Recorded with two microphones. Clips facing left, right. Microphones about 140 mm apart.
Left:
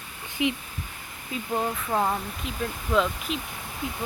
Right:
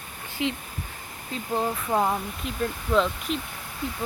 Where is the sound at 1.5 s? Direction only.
5° right (ahead or behind).